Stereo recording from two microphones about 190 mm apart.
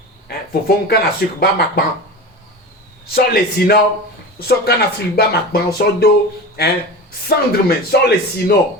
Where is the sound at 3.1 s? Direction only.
55° left (ahead or behind).